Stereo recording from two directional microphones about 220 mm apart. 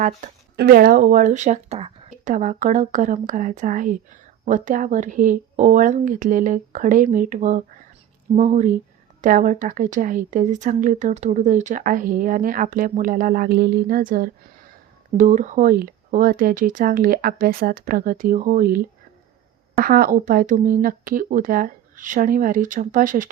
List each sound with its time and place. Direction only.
0.0 s speech: 35° right (ahead or behind)
0.5 s speech: 45° right (ahead or behind)